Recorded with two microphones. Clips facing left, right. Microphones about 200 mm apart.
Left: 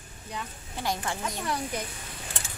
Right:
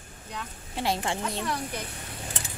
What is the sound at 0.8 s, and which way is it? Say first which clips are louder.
Speech: right 3 dB; 25° right (ahead or behind).